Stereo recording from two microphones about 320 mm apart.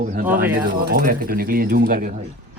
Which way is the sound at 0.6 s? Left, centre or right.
Right.